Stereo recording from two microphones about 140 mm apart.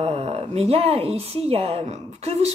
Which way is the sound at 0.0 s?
45° right (ahead or behind).